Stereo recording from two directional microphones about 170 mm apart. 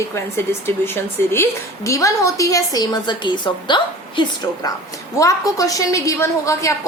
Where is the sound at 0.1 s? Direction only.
15° left (ahead or behind).